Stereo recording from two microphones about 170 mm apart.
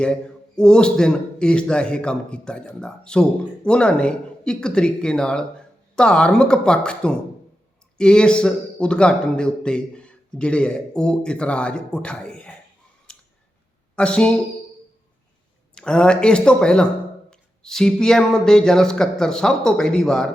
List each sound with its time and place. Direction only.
0.0 s a man's voice: 5° left (ahead or behind)
13.9 s speech: 5° left (ahead or behind)
15.7 s a man's voice: 5° left (ahead or behind)